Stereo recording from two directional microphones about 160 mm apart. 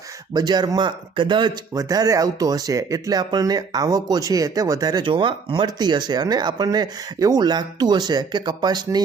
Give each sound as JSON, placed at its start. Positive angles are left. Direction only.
{"t": 0.3, "sound": "speech", "side_deg": -25}